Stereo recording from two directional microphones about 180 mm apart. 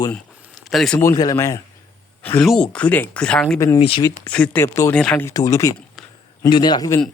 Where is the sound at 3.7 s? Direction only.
30° left (ahead or behind).